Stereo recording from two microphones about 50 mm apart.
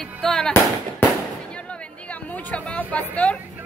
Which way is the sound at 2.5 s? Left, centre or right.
Left.